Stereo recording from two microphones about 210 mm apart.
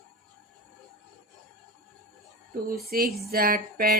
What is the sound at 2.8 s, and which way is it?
Music, 45° right (ahead or behind).